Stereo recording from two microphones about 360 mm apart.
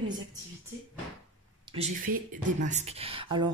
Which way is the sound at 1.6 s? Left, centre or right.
Centre.